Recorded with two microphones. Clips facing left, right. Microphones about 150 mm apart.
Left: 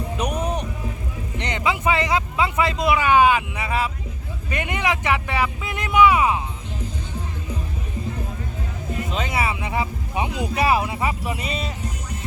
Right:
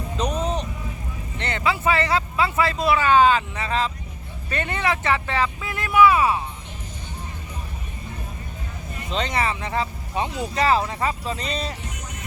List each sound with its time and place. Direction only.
0.2 s vehicle: 10° left (ahead or behind)
1.4 s speech: 15° left (ahead or behind)
9.1 s speech: 5° left (ahead or behind)